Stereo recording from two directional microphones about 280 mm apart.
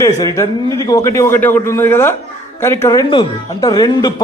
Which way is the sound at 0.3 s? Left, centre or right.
Centre.